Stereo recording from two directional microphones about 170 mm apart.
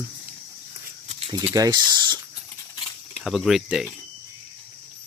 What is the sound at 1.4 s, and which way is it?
Speech, 15° right (ahead or behind).